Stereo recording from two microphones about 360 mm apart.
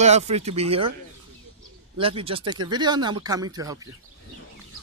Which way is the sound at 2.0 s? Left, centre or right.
Centre.